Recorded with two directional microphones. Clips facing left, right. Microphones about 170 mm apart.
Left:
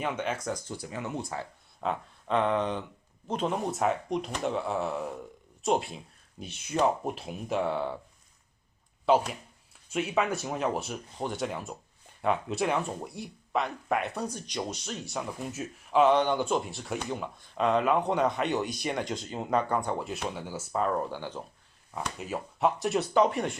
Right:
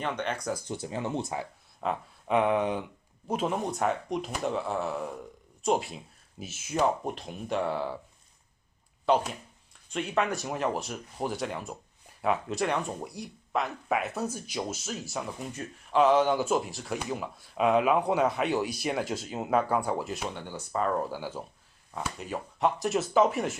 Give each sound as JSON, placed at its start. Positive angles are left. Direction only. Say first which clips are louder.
{"t": 0.0, "sound": "speech", "louder": "even", "side_deg": 5}
{"t": 0.6, "sound": "speech", "louder": "right 3 dB", "side_deg": -20}
{"t": 1.8, "sound": "speech", "louder": "even", "side_deg": 0}
{"t": 9.1, "sound": "speech", "louder": "left 1 dB", "side_deg": 0}